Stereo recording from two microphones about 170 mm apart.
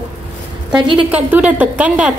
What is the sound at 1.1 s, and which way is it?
Speech, 10° right (ahead or behind).